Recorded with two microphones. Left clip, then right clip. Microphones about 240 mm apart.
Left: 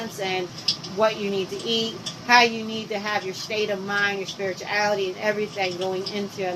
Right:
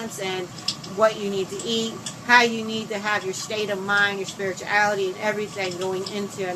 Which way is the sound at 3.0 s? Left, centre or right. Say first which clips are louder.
Right 4 dB; centre.